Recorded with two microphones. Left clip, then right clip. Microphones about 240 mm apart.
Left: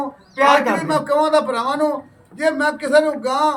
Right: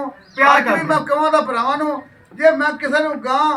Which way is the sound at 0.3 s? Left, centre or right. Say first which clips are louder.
Right 2 dB; centre.